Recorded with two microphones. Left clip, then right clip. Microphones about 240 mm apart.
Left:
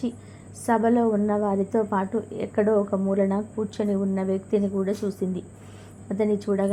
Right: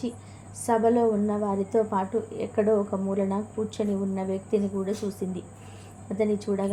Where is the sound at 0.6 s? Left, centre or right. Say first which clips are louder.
Even; centre.